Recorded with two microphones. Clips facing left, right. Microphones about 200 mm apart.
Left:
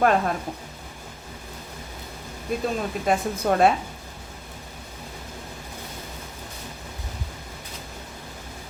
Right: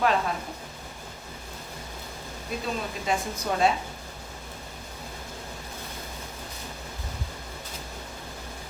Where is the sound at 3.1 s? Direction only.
55° left (ahead or behind).